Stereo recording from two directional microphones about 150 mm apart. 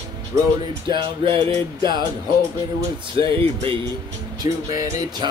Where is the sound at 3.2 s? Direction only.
35° right (ahead or behind).